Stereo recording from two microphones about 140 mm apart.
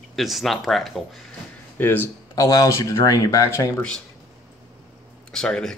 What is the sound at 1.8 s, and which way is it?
Speech, 15° left (ahead or behind).